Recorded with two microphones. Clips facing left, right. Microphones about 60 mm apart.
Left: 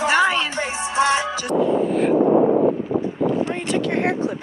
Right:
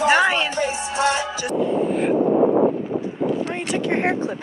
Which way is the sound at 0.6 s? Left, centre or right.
Left.